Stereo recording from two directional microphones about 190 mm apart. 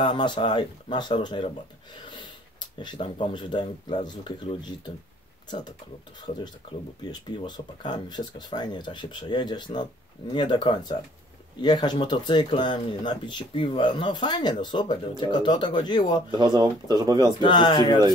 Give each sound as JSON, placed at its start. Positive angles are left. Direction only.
{"t": 0.0, "sound": "speech", "side_deg": 25}
{"t": 2.8, "sound": "speech", "side_deg": 25}
{"t": 6.6, "sound": "speech", "side_deg": 25}
{"t": 16.3, "sound": "speech", "side_deg": -20}
{"t": 17.4, "sound": "speech", "side_deg": 25}